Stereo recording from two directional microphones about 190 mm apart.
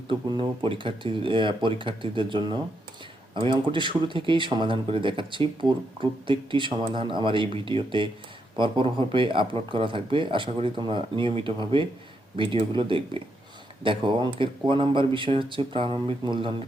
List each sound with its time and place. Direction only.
0.1 s speech: 25° right (ahead or behind)